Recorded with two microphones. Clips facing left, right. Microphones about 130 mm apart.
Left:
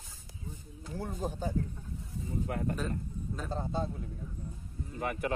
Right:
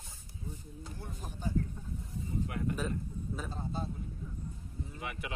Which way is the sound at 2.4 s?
40° left (ahead or behind).